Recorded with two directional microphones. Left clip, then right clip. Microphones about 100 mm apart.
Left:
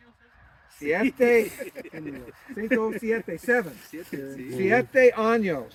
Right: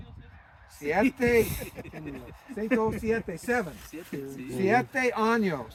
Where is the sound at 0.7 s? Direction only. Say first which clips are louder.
Left 3 dB; 45° right (ahead or behind).